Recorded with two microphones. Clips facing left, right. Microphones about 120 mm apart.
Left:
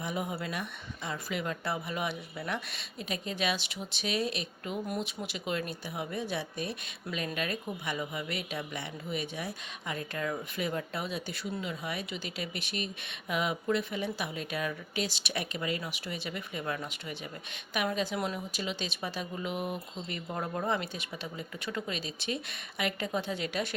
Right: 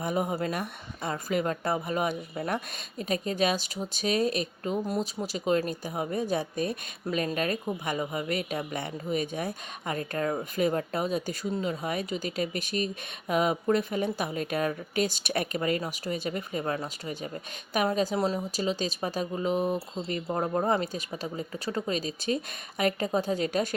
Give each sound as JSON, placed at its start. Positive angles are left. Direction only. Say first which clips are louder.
{"t": 0.0, "sound": "a woman's voice", "louder": "right 6 dB", "side_deg": -45}